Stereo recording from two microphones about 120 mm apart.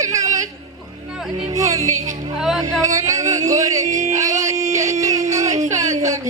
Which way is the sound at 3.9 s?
90° right.